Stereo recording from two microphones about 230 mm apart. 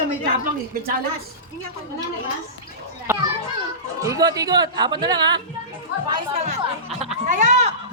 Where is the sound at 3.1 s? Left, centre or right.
Centre.